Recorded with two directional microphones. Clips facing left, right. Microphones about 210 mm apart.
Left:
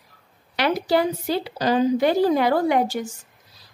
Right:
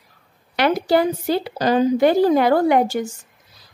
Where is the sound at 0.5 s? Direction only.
50° right (ahead or behind).